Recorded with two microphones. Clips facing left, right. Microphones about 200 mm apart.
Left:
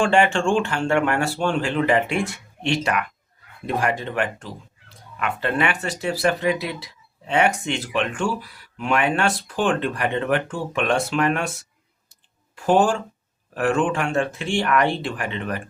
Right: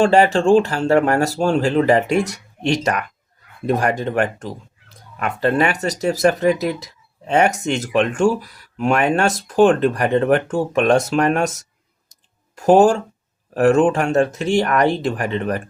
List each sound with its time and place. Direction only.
0.0 s speech: 35° right (ahead or behind)